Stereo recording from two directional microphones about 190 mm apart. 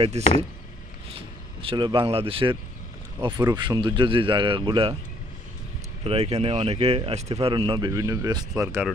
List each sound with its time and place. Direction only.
0.2 s speech: 35° right (ahead or behind)
1.6 s speech: 25° right (ahead or behind)
6.0 s speech: 35° right (ahead or behind)